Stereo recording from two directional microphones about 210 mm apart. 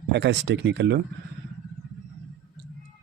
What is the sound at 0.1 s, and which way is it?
Speech, 55° right (ahead or behind).